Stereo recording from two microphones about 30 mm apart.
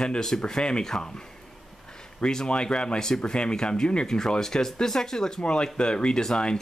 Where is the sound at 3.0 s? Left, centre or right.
Centre.